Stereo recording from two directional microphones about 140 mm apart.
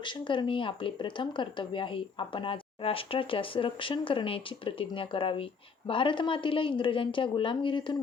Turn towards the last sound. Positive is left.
turn(degrees=35)  # may be behind; listen again after turning